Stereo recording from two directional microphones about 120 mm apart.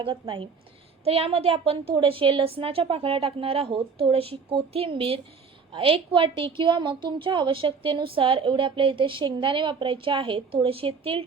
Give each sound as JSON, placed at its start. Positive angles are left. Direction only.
{"t": 0.0, "sound": "a woman's voice", "side_deg": -45}
{"t": 1.0, "sound": "a woman's voice", "side_deg": -55}